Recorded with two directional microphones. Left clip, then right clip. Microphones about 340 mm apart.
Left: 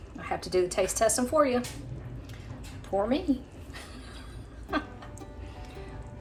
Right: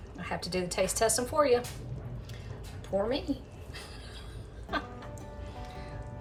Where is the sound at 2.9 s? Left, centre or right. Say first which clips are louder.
Left 3 dB; centre.